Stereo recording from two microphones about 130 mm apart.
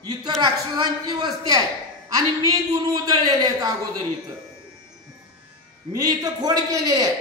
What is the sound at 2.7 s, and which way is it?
A man's voice, 30° right (ahead or behind).